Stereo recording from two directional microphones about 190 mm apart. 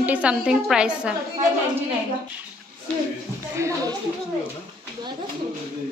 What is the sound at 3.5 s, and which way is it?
Speech, 15° right (ahead or behind).